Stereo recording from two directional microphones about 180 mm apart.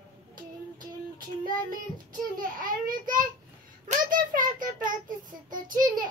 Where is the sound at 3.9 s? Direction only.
50° right (ahead or behind).